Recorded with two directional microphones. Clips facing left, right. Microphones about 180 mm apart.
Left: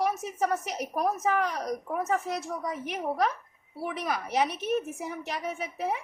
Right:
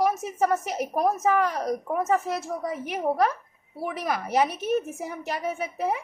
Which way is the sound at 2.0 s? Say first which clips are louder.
Right 4 dB; 50° right (ahead or behind).